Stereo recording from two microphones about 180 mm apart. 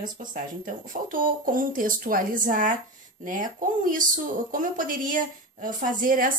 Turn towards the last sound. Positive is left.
turn(degrees=-50)  # may be behind; listen again after turning